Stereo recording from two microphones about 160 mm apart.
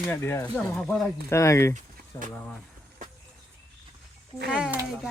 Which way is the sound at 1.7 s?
55° right (ahead or behind).